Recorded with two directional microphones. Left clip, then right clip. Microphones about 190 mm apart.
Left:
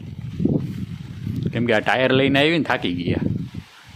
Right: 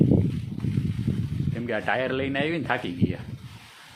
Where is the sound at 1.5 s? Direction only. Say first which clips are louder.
Left 8 dB; 55° left (ahead or behind).